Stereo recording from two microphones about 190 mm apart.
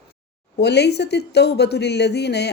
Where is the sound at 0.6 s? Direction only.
60° left (ahead or behind).